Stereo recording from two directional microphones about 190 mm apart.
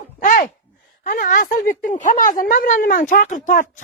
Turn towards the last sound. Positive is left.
turn(degrees=40)  # may be behind; listen again after turning